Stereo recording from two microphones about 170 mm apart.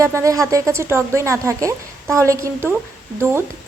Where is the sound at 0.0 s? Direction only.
15° right (ahead or behind).